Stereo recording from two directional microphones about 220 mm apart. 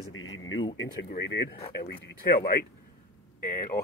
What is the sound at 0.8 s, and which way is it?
Speech, 55° left (ahead or behind).